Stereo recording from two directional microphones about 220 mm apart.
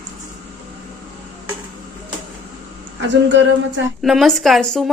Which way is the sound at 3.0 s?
55° right (ahead or behind).